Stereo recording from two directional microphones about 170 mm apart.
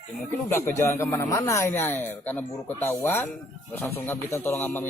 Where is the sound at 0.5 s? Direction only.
15° left (ahead or behind).